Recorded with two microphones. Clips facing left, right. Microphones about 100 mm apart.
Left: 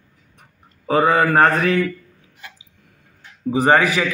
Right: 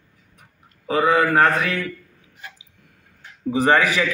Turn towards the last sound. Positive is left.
turn(degrees=30)  # may be behind; listen again after turning